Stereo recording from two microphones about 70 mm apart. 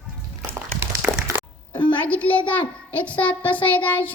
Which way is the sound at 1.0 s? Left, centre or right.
Centre.